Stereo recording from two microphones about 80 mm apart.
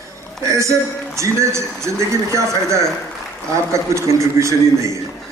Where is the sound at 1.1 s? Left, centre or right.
Right.